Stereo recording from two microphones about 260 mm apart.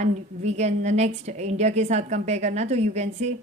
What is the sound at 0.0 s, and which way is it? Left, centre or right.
A woman's voice, right.